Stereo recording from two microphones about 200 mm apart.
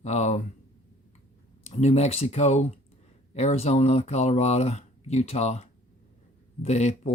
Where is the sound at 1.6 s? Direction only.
30° left (ahead or behind).